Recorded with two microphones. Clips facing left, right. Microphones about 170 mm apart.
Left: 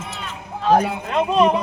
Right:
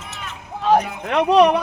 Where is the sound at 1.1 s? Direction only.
75° right (ahead or behind).